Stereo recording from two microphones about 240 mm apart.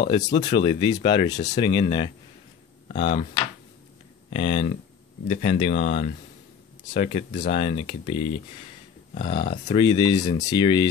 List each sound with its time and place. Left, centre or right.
0.0 s speech: centre
4.3 s speech: left